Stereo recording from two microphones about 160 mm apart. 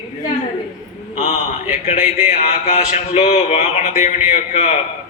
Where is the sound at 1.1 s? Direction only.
40° left (ahead or behind).